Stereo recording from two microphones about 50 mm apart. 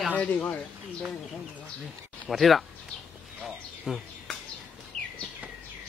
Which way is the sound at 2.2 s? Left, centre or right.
Centre.